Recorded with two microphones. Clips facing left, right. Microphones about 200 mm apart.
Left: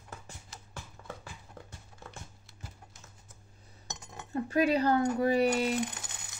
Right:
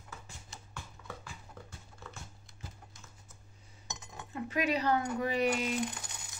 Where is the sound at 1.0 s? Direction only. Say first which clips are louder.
Left 3 dB; 50° left (ahead or behind).